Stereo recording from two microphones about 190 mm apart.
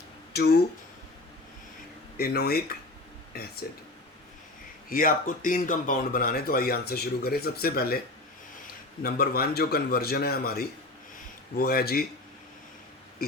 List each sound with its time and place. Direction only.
0.3 s speech: 60° left (ahead or behind)
2.1 s speech: 55° left (ahead or behind)
4.9 s speech: 45° left (ahead or behind)
9.0 s speech: 55° left (ahead or behind)